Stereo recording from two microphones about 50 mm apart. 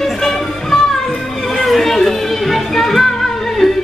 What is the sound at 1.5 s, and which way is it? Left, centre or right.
Music, centre.